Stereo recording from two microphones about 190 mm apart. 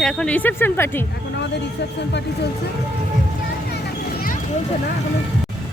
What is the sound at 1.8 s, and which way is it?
Speech, 65° left (ahead or behind).